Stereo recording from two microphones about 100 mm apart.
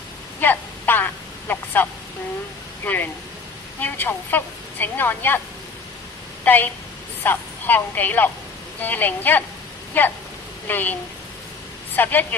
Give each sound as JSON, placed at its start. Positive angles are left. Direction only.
{"t": 0.4, "sound": "a woman's voice", "side_deg": 20}
{"t": 6.4, "sound": "a woman's voice", "side_deg": 20}